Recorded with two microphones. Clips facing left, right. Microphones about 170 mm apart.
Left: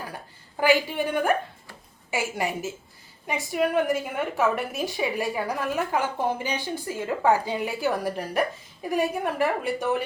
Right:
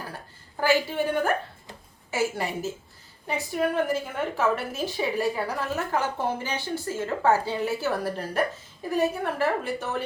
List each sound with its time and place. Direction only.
0.6 s a woman's voice: 15° left (ahead or behind)